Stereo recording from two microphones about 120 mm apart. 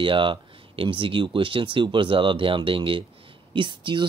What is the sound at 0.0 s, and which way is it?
Speech, 45° right (ahead or behind).